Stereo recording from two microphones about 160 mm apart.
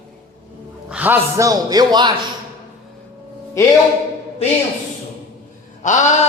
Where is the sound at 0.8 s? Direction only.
10° right (ahead or behind); by 2.1 s 25° right (ahead or behind).